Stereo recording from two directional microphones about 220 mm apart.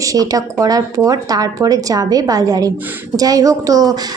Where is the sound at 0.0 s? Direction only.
15° right (ahead or behind).